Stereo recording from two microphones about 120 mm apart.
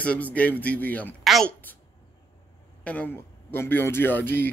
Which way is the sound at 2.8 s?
15° left (ahead or behind).